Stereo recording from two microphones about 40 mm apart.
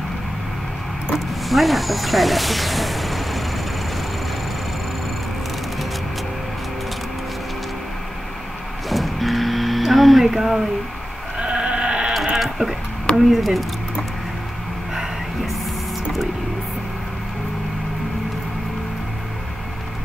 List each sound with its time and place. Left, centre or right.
1.5 s speech: centre
8.8 s cattle: centre
11.3 s sheep: right
12.4 s a sound: centre
13.1 s speech: centre